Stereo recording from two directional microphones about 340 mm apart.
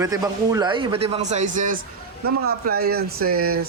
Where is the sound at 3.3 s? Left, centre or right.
Right.